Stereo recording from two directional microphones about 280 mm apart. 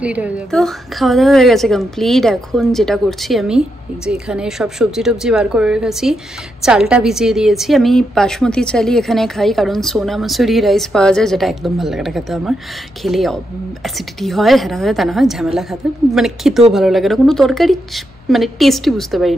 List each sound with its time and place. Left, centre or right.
0.0 s a woman's voice: centre